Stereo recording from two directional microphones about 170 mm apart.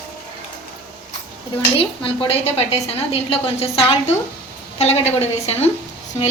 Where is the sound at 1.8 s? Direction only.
30° left (ahead or behind).